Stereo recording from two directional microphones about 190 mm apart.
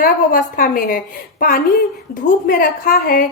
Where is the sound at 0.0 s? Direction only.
45° left (ahead or behind).